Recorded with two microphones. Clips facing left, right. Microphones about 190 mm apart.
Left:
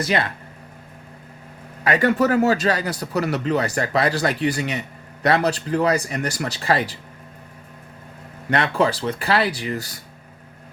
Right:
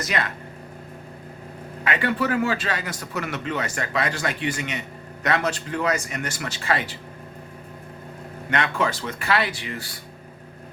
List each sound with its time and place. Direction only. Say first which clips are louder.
0.0 s a man's voice: left 5 dB; 30° left (ahead or behind)
1.8 s a man's voice: left 6 dB; 40° left (ahead or behind)
8.4 s a man's voice: left 4 dB; 35° left (ahead or behind)